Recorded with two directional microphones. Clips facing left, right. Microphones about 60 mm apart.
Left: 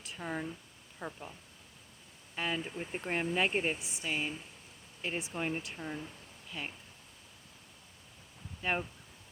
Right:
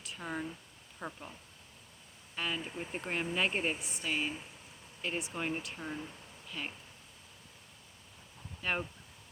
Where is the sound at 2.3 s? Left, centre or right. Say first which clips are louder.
Left 2 dB; left.